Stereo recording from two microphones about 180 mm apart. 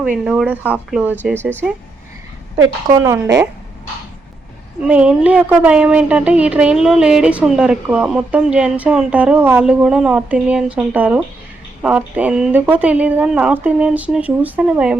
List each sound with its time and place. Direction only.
0.0 s a woman's voice: 5° right (ahead or behind)
3.0 s a woman's voice: 15° right (ahead or behind)
4.8 s a woman's voice: 5° right (ahead or behind)